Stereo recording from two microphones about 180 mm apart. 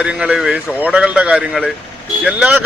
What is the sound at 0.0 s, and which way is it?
A man's voice, 5° right (ahead or behind).